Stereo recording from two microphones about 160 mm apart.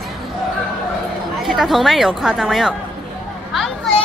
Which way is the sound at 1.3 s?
Centre (ahead or behind).